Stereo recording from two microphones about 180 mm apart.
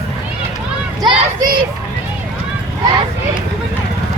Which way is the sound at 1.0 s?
25° right (ahead or behind).